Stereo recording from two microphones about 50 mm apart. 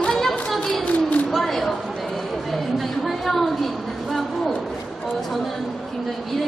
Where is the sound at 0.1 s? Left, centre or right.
Centre.